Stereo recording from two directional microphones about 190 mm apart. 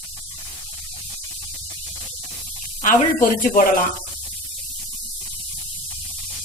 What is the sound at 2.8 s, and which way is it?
Speech, 45° left (ahead or behind).